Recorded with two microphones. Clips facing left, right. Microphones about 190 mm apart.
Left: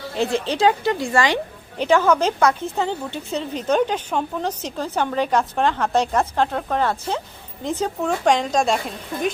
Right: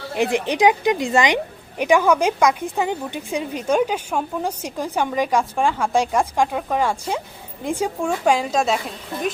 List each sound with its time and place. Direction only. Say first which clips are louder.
0.2 s a woman's voice: right 2 dB; 15° right (ahead or behind)